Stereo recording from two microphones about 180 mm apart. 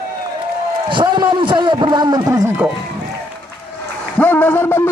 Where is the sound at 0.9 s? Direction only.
25° right (ahead or behind).